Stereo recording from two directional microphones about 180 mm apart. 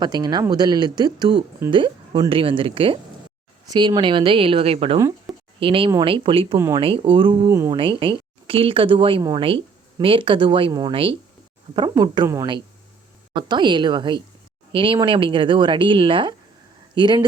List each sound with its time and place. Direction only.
0.0 s speech: 25° right (ahead or behind)
7.5 s speech: 15° right (ahead or behind)
7.8 s speech: 30° right (ahead or behind)
10.9 s speech: 30° right (ahead or behind)